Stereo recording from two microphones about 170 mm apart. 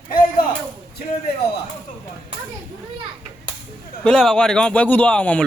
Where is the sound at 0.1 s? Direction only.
55° left (ahead or behind).